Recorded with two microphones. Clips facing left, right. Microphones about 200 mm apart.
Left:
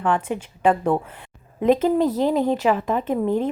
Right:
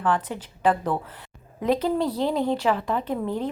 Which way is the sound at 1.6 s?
20° left (ahead or behind).